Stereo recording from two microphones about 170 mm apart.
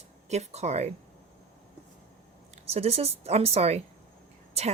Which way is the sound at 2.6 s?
35° right (ahead or behind).